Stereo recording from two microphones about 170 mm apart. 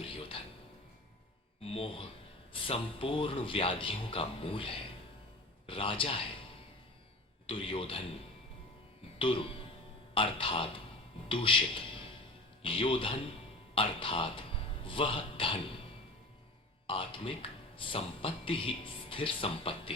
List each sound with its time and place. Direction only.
0.1 s music: 30° left (ahead or behind)
1.6 s a sound: 35° left (ahead or behind)
2.5 s speech: 30° left (ahead or behind)
7.4 s speech: 30° left (ahead or behind)
9.1 s music: 30° left (ahead or behind)
10.2 s speech: 30° left (ahead or behind)
16.8 s speech: 30° left (ahead or behind)